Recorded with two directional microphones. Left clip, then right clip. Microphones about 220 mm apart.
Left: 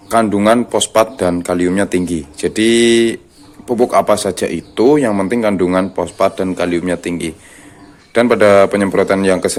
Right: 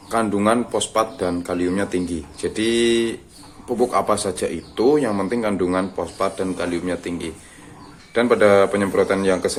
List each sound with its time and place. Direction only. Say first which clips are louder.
0.1 s speech: left 7 dB; 35° left (ahead or behind)